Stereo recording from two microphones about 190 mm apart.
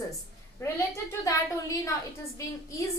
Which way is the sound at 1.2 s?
15° left (ahead or behind).